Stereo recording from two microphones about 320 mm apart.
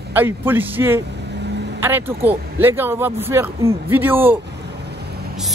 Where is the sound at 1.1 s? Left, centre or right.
Right.